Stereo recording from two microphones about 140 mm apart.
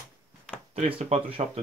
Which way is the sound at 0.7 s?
45° right (ahead or behind).